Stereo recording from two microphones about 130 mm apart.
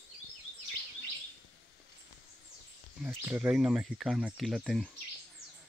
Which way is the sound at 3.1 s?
15° right (ahead or behind).